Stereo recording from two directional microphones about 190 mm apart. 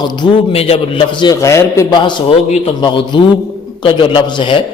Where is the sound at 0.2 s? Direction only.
30° left (ahead or behind).